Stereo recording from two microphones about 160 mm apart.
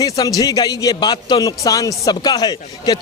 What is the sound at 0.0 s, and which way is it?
A man's voice, 20° left (ahead or behind).